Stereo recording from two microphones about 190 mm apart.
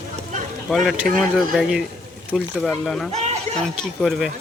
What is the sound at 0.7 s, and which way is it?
Speech, centre (ahead or behind).